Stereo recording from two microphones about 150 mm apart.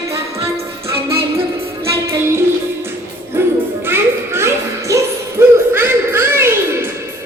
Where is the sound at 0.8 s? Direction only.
15° right (ahead or behind).